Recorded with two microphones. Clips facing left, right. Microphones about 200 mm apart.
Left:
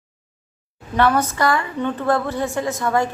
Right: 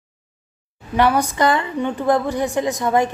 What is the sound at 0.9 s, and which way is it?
Speech, 15° right (ahead or behind).